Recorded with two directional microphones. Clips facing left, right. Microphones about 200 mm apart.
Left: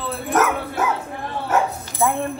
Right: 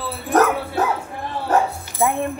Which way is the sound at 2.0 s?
20° right (ahead or behind).